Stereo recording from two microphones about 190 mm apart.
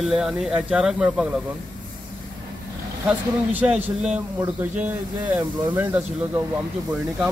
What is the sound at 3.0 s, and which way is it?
A man's voice, 10° right (ahead or behind).